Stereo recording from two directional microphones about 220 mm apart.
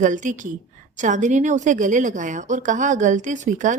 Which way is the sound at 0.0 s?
35° right (ahead or behind).